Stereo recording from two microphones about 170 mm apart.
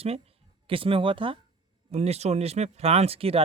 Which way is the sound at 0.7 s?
30° right (ahead or behind).